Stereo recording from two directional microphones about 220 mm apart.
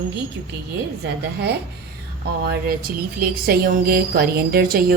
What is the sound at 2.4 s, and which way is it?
Speech, 45° right (ahead or behind).